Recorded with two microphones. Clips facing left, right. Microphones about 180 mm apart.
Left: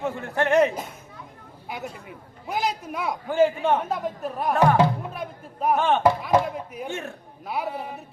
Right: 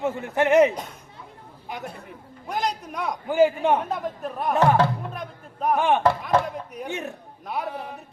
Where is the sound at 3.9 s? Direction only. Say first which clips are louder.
Left 1 dB; centre (ahead or behind).